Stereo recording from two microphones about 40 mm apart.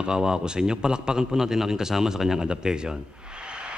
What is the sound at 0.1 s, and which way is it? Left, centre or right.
Speech, centre.